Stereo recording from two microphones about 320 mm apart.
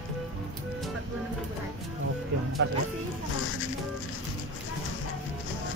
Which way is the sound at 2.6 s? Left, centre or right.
Right.